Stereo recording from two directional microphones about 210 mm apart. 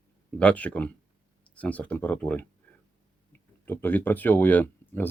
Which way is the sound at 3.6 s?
10° left (ahead or behind).